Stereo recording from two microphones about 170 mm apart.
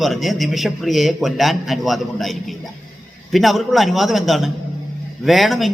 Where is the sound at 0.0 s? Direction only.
Centre (ahead or behind).